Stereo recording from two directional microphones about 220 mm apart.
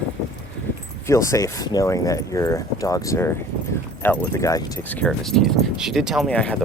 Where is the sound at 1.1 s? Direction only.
15° left (ahead or behind).